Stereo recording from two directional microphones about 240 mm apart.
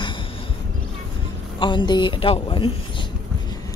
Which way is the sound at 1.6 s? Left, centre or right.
Centre.